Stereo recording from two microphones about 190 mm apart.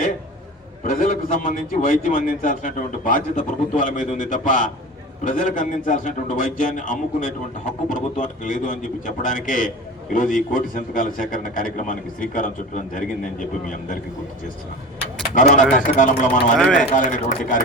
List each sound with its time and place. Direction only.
0.9 s a man's voice: 45° left (ahead or behind)
15.4 s a man's voice: 40° left (ahead or behind)
16.6 s speech: 5° left (ahead or behind)
16.9 s a man's voice: 45° left (ahead or behind)